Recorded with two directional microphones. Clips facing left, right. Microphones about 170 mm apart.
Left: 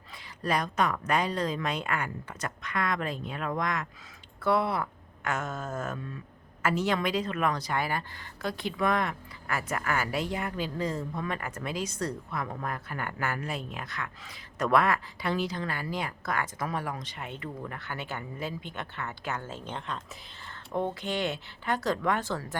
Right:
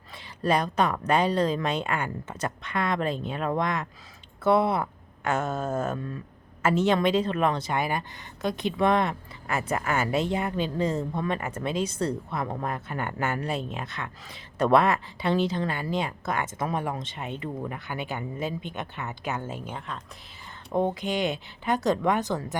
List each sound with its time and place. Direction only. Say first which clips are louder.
0.1 s a woman's voice: right 5 dB; 25° right (ahead or behind); by 20.0 s 5° right (ahead or behind)
20.5 s speech: right 5 dB; 15° right (ahead or behind)